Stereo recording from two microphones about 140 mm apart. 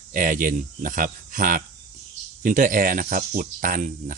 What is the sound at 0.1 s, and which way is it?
Speech, 75° right (ahead or behind).